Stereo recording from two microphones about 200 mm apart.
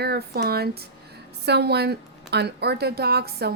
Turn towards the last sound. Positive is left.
turn(degrees=-50)  # may be behind; listen again after turning